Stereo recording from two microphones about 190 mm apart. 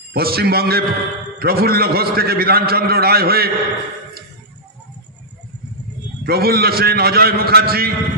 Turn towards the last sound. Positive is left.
turn(degrees=-55)  # may be behind; listen again after turning